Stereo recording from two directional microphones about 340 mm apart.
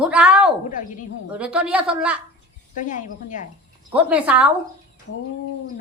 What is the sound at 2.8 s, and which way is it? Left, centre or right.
Speech, left.